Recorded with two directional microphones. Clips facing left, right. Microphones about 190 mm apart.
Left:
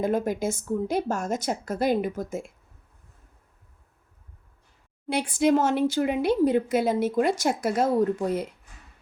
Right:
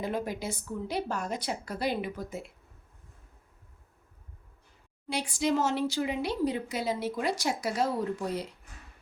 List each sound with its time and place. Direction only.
0.0 s speech: 45° left (ahead or behind)
5.0 s speech: 55° left (ahead or behind)